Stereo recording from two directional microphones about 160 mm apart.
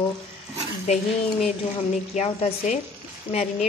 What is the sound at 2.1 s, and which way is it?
A woman's voice, 50° left (ahead or behind).